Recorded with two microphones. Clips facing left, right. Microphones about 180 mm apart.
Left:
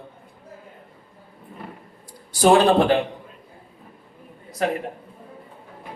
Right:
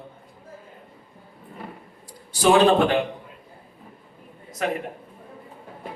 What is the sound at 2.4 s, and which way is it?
Speech, 35° left (ahead or behind).